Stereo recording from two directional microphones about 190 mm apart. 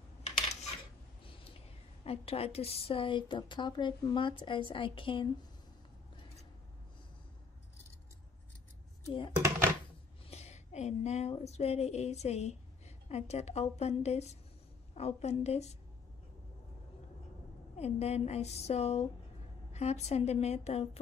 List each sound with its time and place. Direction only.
2.0 s a woman's voice: 30° left (ahead or behind)
9.3 s speech: 10° right (ahead or behind)
10.3 s a woman's voice: 35° left (ahead or behind)
17.7 s a woman's voice: 35° left (ahead or behind)